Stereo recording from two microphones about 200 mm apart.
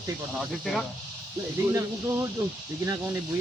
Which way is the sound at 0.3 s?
Centre (ahead or behind).